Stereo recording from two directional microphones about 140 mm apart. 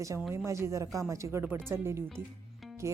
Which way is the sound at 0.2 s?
20° right (ahead or behind).